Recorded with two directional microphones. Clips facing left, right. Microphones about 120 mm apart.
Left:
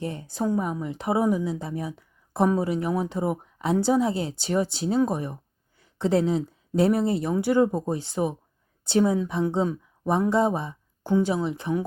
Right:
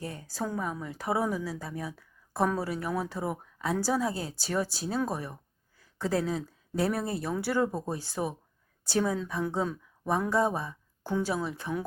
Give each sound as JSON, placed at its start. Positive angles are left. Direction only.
{"t": 0.0, "sound": "a woman's voice", "side_deg": 25}